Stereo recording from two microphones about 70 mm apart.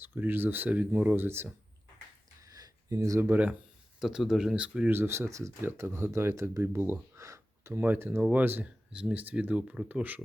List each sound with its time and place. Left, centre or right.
0.0 s speech: right
1.1 s speech: right
2.4 s a sound: right
3.0 s speech: right
3.2 s speech: right
4.0 s speech: centre
4.9 s speech: right
7.2 s a sound: right
7.7 s speech: right
8.2 s speech: right